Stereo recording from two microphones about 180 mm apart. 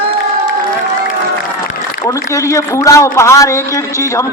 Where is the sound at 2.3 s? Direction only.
15° left (ahead or behind).